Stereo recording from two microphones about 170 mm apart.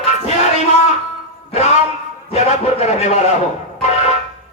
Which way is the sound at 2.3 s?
40° left (ahead or behind).